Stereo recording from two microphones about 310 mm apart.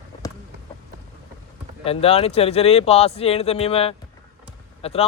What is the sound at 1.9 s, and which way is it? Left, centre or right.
A man's voice, centre.